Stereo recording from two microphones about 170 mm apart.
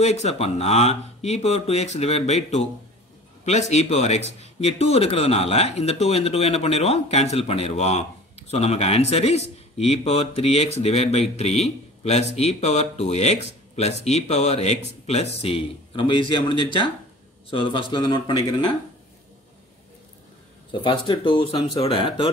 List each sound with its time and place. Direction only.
0.0 s speech: 40° left (ahead or behind)
20.7 s speech: 30° left (ahead or behind)